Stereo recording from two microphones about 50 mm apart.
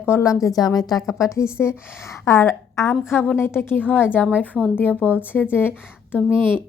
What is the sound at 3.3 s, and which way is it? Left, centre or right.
A woman's voice, left.